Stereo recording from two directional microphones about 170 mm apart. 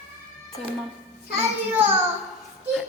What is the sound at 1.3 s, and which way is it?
Speech, 10° right (ahead or behind).